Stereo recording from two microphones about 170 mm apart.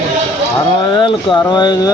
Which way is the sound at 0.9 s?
25° left (ahead or behind).